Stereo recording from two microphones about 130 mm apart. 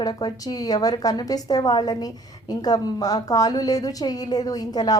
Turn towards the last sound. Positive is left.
turn(degrees=30)  # may be behind; listen again after turning